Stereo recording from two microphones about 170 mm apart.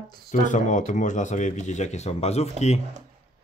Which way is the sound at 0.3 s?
45° left (ahead or behind).